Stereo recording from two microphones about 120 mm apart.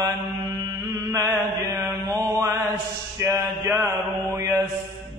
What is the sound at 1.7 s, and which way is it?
Mantra, 20° right (ahead or behind).